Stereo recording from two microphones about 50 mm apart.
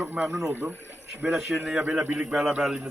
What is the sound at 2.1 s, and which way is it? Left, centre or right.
Speech, right.